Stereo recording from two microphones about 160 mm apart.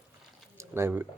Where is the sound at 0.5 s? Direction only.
15° right (ahead or behind).